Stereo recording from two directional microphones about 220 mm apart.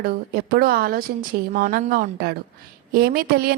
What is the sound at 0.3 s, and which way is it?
A woman's voice, 45° right (ahead or behind).